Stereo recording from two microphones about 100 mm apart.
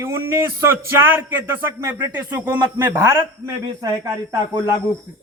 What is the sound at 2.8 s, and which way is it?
Speech, 35° right (ahead or behind).